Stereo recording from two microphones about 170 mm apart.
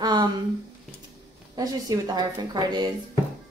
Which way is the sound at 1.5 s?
20° right (ahead or behind).